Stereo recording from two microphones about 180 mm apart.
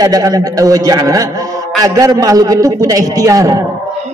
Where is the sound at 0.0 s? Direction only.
20° right (ahead or behind).